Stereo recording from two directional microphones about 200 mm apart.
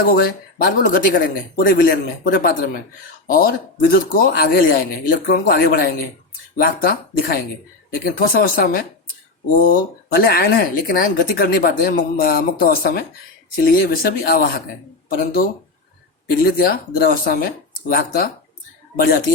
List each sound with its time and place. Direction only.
0.0 s speech: 50° left (ahead or behind)